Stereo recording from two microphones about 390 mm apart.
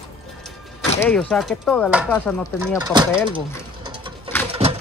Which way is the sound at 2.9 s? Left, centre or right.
Centre.